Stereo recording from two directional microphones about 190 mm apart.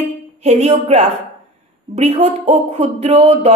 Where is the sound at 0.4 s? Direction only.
35° right (ahead or behind).